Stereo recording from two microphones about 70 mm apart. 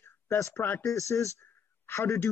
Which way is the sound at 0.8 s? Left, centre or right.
Left.